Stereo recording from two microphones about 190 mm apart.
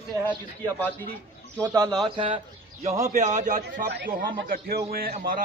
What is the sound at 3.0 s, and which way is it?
Speech, 40° right (ahead or behind).